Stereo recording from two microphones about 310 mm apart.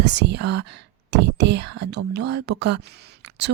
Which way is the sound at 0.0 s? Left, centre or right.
Right.